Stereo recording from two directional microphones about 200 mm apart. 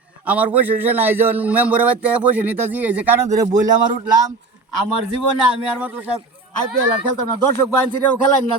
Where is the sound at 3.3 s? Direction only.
40° right (ahead or behind).